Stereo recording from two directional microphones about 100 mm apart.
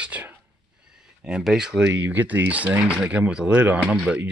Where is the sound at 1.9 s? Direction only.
20° right (ahead or behind).